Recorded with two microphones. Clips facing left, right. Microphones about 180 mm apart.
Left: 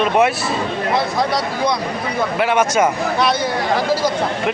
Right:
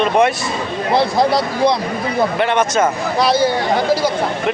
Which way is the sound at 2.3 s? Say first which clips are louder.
Left 4 dB; 5° left (ahead or behind).